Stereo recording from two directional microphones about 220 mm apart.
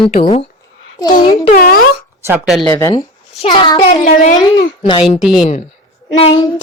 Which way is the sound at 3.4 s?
20° left (ahead or behind).